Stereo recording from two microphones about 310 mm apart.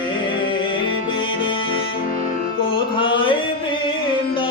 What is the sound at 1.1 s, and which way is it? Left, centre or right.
Music, centre.